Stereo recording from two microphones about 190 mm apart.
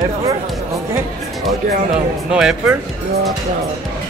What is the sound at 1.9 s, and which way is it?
Speech, 5° right (ahead or behind).